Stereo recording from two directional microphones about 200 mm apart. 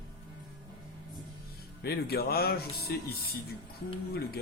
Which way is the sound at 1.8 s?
50° left (ahead or behind).